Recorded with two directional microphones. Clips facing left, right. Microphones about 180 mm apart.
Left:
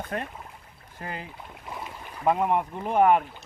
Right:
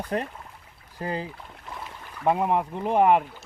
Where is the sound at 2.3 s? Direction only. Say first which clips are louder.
Right 1 dB; 20° right (ahead or behind).